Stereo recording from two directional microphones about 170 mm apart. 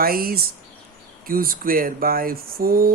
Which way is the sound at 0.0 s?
60° right (ahead or behind).